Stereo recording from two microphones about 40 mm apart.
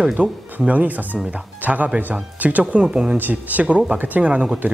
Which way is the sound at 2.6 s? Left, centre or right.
Right.